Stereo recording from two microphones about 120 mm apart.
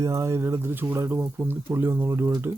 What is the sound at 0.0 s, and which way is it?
Speech, 30° right (ahead or behind).